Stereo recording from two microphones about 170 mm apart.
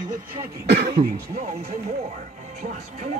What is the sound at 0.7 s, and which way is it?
Speech, 70° right (ahead or behind).